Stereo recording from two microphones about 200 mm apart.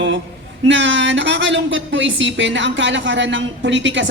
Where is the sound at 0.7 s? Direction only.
65° right (ahead or behind).